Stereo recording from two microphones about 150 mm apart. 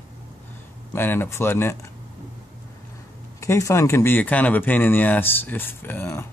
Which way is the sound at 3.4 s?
20° left (ahead or behind).